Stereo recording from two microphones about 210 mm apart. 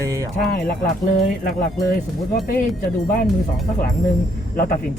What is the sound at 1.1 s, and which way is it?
Speech, 40° left (ahead or behind).